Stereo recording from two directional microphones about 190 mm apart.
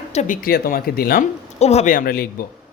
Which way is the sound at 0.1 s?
40° left (ahead or behind).